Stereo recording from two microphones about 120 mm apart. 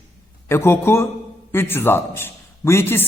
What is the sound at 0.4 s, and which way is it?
A man's voice, 20° left (ahead or behind).